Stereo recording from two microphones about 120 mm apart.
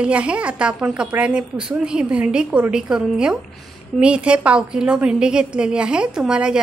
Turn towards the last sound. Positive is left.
turn(degrees=-5)  # may be behind; listen again after turning